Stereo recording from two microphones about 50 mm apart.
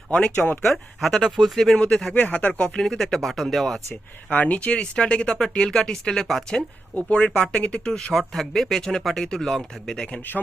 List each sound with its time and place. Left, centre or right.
0.1 s speech: centre
0.3 s speech: left
0.6 s speech: centre
2.1 s speech: left
2.7 s speech: centre
4.3 s speech: left; by 6.7 s centre
6.9 s speech: left
10.2 s speech: left